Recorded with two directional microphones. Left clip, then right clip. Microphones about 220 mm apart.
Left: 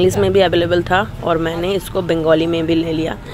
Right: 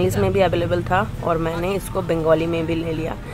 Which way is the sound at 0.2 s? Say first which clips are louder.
Left 5 dB; 10° left (ahead or behind).